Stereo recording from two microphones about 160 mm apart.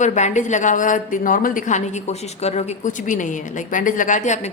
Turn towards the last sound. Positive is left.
turn(degrees=50)  # may be behind; listen again after turning